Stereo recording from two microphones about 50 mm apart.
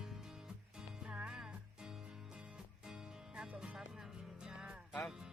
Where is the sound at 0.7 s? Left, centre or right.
Centre.